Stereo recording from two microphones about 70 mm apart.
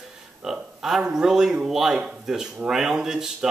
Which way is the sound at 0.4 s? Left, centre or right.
Centre.